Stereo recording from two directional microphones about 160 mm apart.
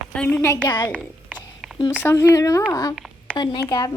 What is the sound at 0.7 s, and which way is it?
Speech, 25° left (ahead or behind).